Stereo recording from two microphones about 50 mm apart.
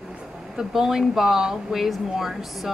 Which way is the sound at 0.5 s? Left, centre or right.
Centre.